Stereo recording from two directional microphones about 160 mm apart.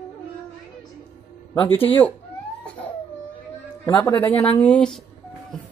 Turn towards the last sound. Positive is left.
turn(degrees=5)  # may be behind; listen again after turning